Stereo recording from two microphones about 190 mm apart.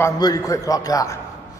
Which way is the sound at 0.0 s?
15° left (ahead or behind).